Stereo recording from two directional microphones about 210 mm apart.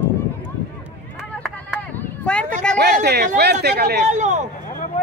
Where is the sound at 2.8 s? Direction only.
50° right (ahead or behind).